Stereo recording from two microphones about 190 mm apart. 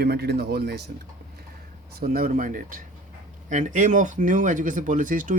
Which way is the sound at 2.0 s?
50° right (ahead or behind).